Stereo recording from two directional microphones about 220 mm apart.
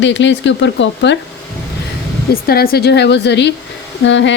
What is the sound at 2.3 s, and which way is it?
A woman's voice, 45° left (ahead or behind).